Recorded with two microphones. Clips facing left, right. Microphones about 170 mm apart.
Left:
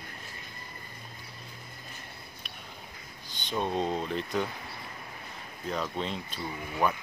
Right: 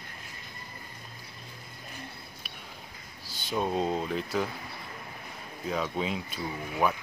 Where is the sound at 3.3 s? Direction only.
5° right (ahead or behind).